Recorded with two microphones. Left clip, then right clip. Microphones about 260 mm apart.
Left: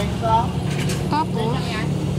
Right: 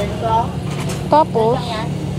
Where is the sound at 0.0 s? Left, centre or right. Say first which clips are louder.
Right 2 dB; left.